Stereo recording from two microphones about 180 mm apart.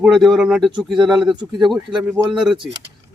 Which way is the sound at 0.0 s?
Centre (ahead or behind).